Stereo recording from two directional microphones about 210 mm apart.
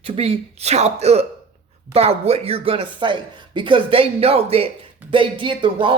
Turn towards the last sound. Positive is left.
turn(degrees=-25)  # may be behind; listen again after turning